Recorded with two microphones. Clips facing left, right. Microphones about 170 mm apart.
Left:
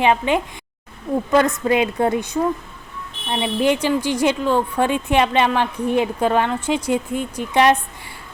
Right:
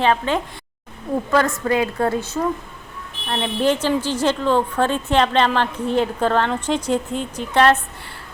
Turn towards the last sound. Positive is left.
turn(degrees=15)  # may be behind; listen again after turning